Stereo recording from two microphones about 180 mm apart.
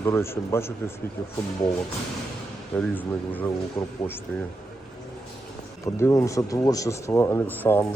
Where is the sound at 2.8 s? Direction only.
10° left (ahead or behind).